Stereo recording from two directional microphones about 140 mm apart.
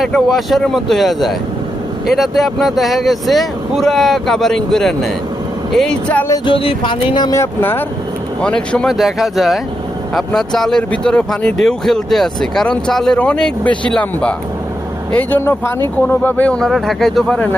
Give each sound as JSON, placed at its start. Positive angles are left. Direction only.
{"t": 0.0, "sound": "speech", "side_deg": 0}
{"t": 6.4, "sound": "speech", "side_deg": 40}
{"t": 7.3, "sound": "speech", "side_deg": 15}